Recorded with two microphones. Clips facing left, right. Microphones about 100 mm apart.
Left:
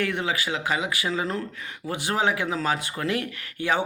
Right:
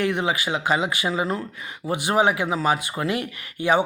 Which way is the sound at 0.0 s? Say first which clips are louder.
Right 3 dB; 20° right (ahead or behind).